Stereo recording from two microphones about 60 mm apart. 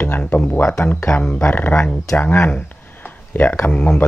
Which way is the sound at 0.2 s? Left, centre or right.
Left.